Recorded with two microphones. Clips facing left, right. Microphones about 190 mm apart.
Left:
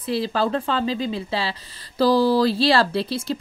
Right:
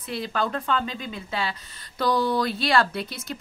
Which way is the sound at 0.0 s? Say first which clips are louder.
Left 5 dB; 30° left (ahead or behind).